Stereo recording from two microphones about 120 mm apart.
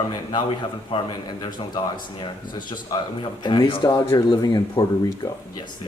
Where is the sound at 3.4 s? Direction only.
40° left (ahead or behind).